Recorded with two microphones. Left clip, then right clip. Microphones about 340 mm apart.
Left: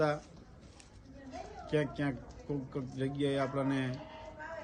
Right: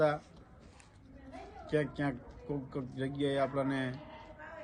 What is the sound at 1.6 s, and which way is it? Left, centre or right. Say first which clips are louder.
A man's voice: even; centre.